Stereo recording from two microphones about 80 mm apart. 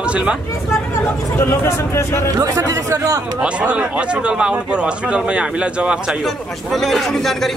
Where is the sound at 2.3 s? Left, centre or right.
Right.